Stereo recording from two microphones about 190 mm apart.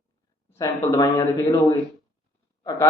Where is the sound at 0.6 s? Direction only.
15° left (ahead or behind).